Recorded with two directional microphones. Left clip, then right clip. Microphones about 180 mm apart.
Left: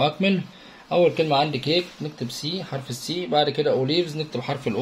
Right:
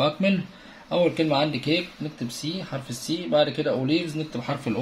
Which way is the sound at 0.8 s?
30° left (ahead or behind).